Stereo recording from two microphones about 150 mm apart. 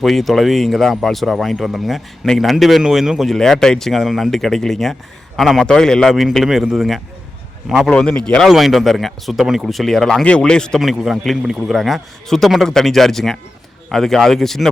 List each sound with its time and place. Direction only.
0.0 s a man's voice: centre (ahead or behind)